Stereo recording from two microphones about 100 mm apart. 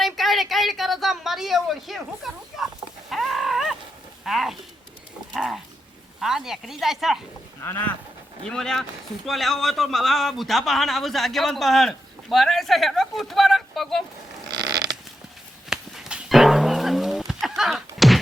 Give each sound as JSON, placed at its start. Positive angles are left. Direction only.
{"t": 0.0, "sound": "a sound", "side_deg": 0}
{"t": 4.2, "sound": "speech", "side_deg": 0}
{"t": 5.3, "sound": "dog", "side_deg": 0}
{"t": 6.1, "sound": "a man's voice", "side_deg": -5}
{"t": 7.6, "sound": "speech", "side_deg": 25}
{"t": 8.4, "sound": "a man's voice", "side_deg": 5}
{"t": 15.7, "sound": "a sound", "side_deg": -5}